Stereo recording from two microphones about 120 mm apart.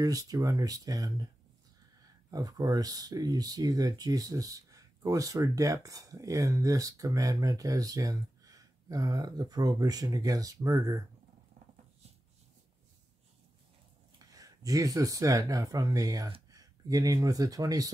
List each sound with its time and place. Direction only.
0.0 s speech: 30° right (ahead or behind)
2.3 s speech: 30° right (ahead or behind)
14.1 s speech: 30° right (ahead or behind)